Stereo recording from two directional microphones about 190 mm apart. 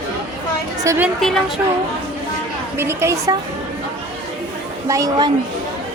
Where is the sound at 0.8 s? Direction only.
15° right (ahead or behind).